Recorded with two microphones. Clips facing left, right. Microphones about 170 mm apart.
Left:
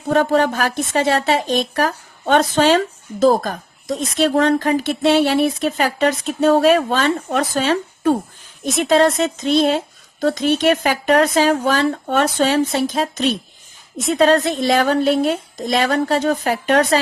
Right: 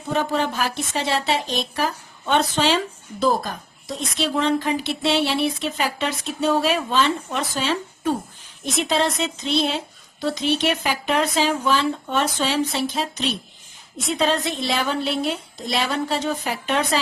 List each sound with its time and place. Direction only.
0.1 s a woman's voice: 50° left (ahead or behind)